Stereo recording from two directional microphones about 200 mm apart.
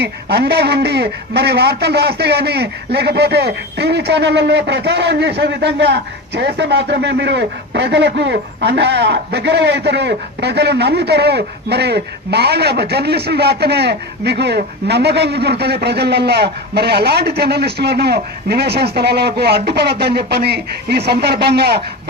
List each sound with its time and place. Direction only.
0.0 s speech: 55° right (ahead or behind)